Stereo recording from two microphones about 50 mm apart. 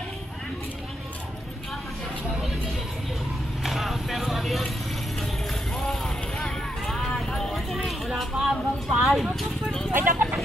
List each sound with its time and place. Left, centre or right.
3.6 s vehicle: centre
5.9 s vehicle: centre
6.8 s clip-clop: centre
9.9 s vehicle: right